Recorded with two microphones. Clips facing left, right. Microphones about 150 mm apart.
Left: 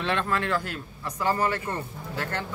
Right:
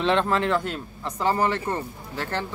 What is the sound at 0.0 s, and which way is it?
A man's voice, 25° right (ahead or behind).